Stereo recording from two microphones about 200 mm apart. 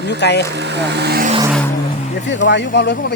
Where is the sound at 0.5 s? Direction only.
60° right (ahead or behind).